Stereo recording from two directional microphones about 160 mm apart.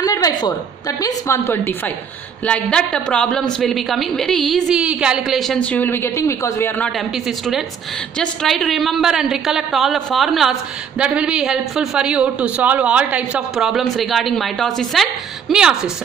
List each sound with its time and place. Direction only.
0.0 s a sound: 20° left (ahead or behind)
0.4 s a woman's voice: 20° left (ahead or behind)
7.2 s a woman's voice: centre (ahead or behind)